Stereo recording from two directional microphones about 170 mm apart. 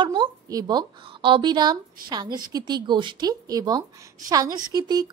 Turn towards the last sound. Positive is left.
turn(degrees=-25)  # may be behind; listen again after turning